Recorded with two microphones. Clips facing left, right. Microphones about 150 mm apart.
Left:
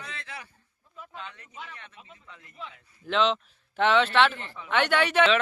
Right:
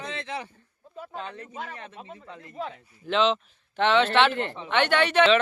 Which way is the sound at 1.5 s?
45° right (ahead or behind).